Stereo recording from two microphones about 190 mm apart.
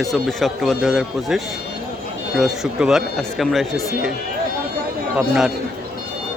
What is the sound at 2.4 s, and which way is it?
Speech, 5° right (ahead or behind).